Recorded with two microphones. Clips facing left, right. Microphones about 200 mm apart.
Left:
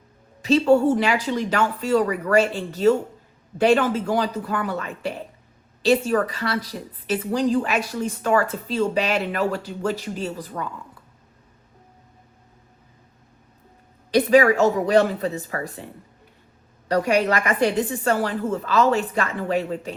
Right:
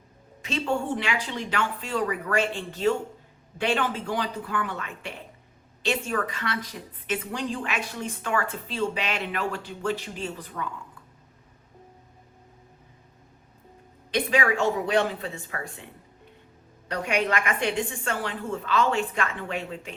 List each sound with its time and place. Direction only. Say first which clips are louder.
0.4 s a woman's voice: left 11 dB; 40° left (ahead or behind)
14.1 s a woman's voice: left 9 dB; 40° left (ahead or behind)
16.9 s a woman's voice: left 7 dB; 40° left (ahead or behind)